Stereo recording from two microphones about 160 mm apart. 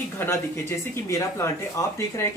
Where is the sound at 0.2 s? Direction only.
15° left (ahead or behind).